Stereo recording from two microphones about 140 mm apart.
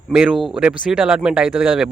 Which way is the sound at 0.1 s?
Centre (ahead or behind).